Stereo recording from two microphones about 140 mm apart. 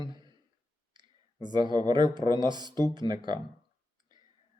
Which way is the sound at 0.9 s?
30° right (ahead or behind).